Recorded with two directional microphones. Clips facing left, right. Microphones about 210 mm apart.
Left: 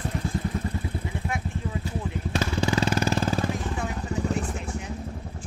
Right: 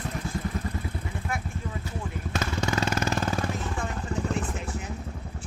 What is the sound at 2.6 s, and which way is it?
Vehicle, 35° left (ahead or behind).